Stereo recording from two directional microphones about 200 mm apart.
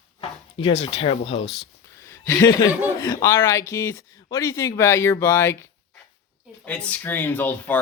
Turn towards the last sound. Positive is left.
turn(degrees=10)  # may be behind; listen again after turning